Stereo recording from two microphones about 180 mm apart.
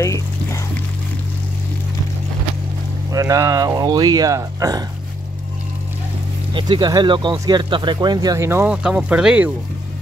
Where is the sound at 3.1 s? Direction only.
20° right (ahead or behind).